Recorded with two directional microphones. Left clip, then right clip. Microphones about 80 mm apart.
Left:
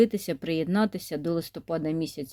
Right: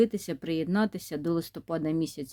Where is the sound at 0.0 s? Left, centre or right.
Centre.